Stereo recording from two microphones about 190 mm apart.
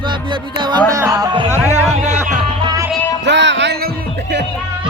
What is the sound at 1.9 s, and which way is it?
Speech, 35° right (ahead or behind).